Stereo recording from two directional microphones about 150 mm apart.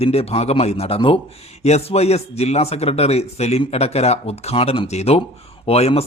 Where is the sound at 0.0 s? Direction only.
40° left (ahead or behind).